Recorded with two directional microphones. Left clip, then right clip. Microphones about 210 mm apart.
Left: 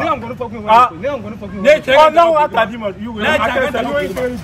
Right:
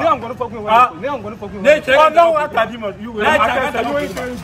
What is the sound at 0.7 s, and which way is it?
A man's voice, centre (ahead or behind).